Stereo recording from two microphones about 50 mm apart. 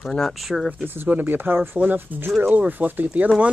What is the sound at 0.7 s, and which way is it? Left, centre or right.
Speech, right.